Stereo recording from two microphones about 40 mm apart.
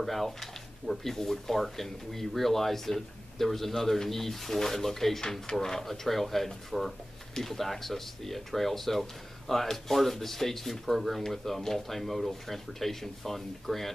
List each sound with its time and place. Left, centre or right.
0.0 s speech: centre